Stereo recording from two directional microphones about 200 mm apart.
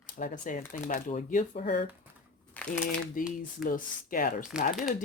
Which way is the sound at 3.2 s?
40° left (ahead or behind).